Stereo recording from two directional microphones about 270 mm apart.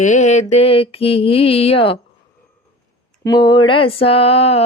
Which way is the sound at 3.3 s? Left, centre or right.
Centre.